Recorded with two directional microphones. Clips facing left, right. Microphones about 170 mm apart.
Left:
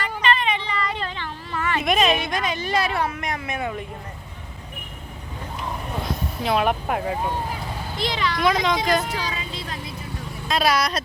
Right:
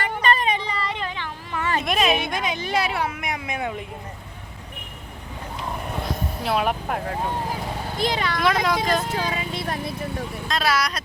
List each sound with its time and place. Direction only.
0.2 s a sound: 40° right (ahead or behind)
0.9 s a sound: 15° right (ahead or behind)
1.8 s speech: centre (ahead or behind)
6.4 s speech: 5° right (ahead or behind)
7.9 s speech: 50° right (ahead or behind)
8.4 s speech: 5° right (ahead or behind)
9.1 s speech: 50° right (ahead or behind)
10.5 s speech: 15° left (ahead or behind)